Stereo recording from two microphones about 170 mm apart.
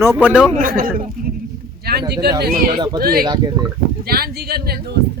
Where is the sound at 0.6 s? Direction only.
55° right (ahead or behind).